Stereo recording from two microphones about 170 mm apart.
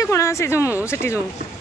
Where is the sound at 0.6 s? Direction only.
10° right (ahead or behind).